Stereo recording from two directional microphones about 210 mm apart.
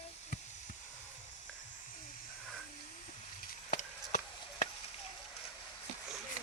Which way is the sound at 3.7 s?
45° left (ahead or behind).